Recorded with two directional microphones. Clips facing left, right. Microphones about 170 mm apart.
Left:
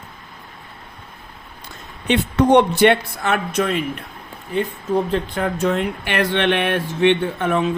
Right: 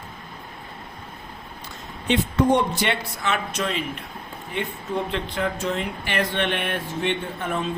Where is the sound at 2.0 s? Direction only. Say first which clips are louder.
Left 4 dB; 70° left (ahead or behind); by 4.0 s 55° left (ahead or behind).